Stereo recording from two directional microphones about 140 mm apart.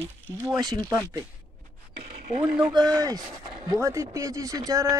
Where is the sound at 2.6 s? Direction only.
30° right (ahead or behind).